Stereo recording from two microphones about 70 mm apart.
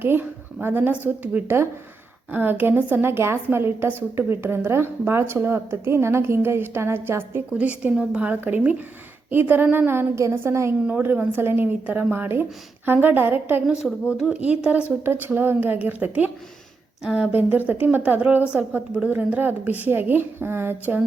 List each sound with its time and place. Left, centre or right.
0.0 s a woman's voice: right
7.6 s a woman's voice: centre
13.8 s speech: centre
14.3 s speech: centre
15.0 s a woman's voice: right
17.0 s a woman's voice: centre
17.3 s a woman's voice: right